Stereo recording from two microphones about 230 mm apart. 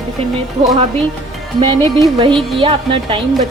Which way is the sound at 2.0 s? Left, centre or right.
Right.